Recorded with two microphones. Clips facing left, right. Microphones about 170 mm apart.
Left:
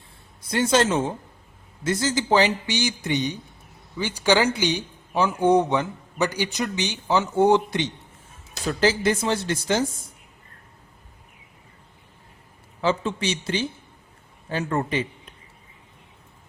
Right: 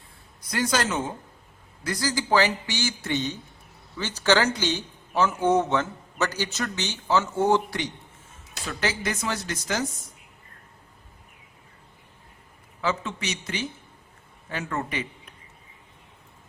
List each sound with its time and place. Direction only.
0.4 s a man's voice: 25° left (ahead or behind)
12.8 s a man's voice: 30° left (ahead or behind)